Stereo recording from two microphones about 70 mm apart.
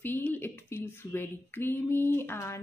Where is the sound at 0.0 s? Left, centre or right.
Left.